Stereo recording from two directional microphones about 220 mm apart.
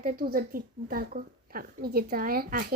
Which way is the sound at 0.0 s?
40° right (ahead or behind).